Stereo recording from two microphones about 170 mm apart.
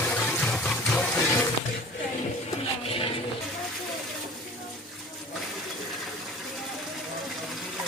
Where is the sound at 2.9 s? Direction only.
35° left (ahead or behind).